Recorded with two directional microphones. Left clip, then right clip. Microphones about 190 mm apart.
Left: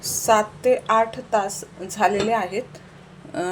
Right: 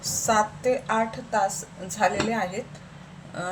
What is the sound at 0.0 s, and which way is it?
A woman's voice, 45° left (ahead or behind).